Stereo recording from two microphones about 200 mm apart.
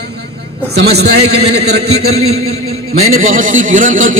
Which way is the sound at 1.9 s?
90° right.